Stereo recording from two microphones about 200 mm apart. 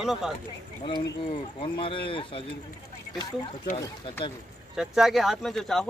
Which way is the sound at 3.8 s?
25° left (ahead or behind).